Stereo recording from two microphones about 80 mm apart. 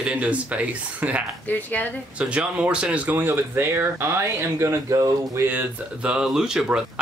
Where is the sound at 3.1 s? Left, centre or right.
Right.